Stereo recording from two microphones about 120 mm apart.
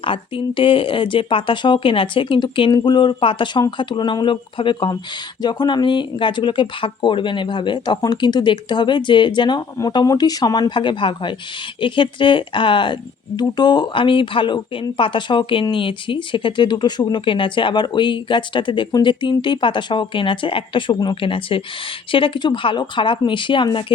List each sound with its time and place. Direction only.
0.0 s speech: 45° left (ahead or behind)